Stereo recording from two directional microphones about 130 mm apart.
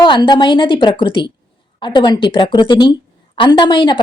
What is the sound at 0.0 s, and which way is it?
A woman's voice, 35° left (ahead or behind).